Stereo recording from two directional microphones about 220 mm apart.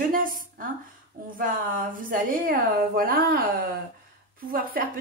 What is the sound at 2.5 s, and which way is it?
Speech, 40° right (ahead or behind).